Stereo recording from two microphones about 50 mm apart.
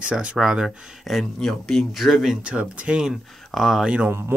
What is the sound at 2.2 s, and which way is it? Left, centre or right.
Speech, right.